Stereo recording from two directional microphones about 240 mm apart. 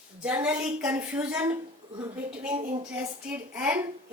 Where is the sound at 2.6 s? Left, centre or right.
Right.